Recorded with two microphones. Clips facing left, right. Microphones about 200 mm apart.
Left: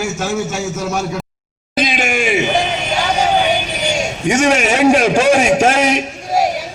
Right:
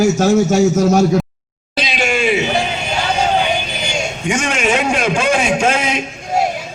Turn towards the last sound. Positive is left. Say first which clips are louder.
# left 1 dB
turn(degrees=40)  # may be behind; listen again after turning